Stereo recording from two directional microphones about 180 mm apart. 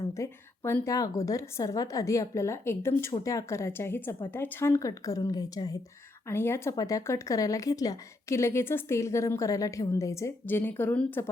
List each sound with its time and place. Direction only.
0.0 s a woman's voice: 15° left (ahead or behind)